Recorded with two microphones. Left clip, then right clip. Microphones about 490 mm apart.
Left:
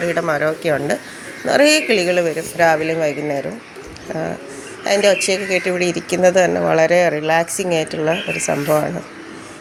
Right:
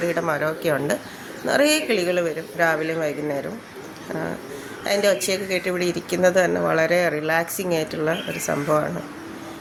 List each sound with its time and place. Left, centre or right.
0.0 s speech: right
4.8 s speech: right